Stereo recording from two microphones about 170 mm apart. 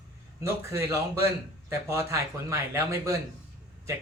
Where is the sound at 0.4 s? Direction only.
15° right (ahead or behind).